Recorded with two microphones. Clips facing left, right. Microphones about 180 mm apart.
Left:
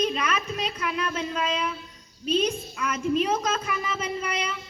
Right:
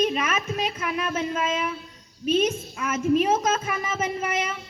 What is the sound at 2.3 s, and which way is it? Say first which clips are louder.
Child singing: right 2 dB; 45° right (ahead or behind).